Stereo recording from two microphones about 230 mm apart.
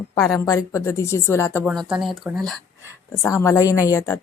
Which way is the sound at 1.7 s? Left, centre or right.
Centre.